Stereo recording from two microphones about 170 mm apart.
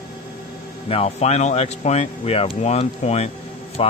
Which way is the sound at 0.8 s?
35° left (ahead or behind).